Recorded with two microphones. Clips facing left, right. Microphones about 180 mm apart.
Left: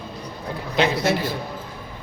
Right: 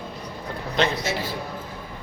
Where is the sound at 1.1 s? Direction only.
60° left (ahead or behind).